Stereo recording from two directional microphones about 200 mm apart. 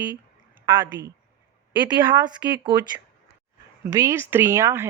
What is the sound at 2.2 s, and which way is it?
Speech, 20° right (ahead or behind).